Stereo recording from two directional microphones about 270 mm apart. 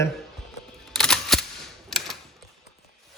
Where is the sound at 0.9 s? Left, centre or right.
Centre.